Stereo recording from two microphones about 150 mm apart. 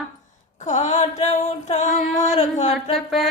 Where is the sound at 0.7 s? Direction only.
50° left (ahead or behind).